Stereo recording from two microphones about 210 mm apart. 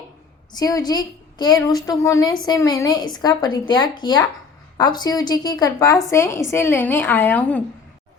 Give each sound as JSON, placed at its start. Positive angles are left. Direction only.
{"t": 0.5, "sound": "a woman's voice", "side_deg": 20}